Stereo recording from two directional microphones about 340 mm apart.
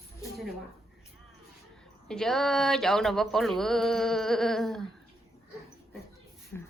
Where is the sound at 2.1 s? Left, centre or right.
Centre.